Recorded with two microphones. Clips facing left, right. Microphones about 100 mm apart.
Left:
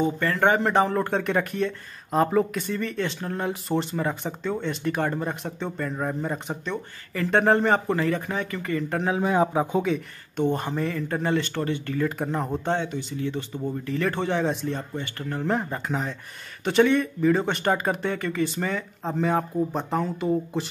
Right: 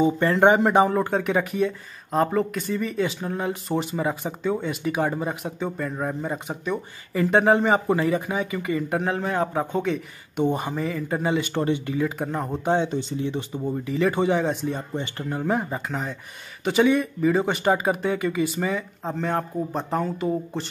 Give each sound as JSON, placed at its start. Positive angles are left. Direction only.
{"t": 0.2, "sound": "speech", "side_deg": -20}
{"t": 9.1, "sound": "a man's voice", "side_deg": 10}
{"t": 10.3, "sound": "speech", "side_deg": -10}
{"t": 12.2, "sound": "speech", "side_deg": 0}
{"t": 12.6, "sound": "speech", "side_deg": -15}
{"t": 15.0, "sound": "speech", "side_deg": -15}